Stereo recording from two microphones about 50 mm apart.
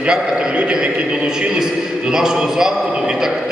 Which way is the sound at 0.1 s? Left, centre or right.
Centre.